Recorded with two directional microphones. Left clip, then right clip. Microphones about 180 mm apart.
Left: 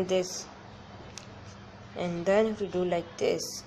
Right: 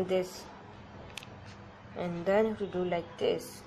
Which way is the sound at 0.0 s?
10° left (ahead or behind).